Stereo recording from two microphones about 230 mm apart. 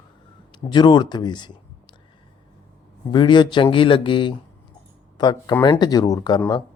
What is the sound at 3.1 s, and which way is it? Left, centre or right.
Speech, centre.